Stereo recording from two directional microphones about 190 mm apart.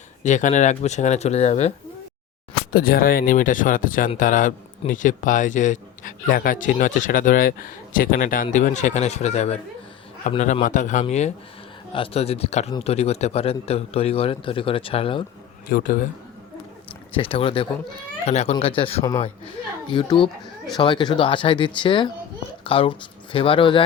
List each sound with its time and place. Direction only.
0.2 s a man's voice: 40° left (ahead or behind)
2.7 s a man's voice: 50° left (ahead or behind); by 15.2 s 30° left (ahead or behind)
15.7 s a man's voice: 50° left (ahead or behind)
17.1 s a man's voice: 30° left (ahead or behind)